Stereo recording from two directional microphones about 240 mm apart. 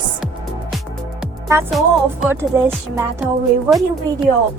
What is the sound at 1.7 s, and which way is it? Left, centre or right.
Speech, centre.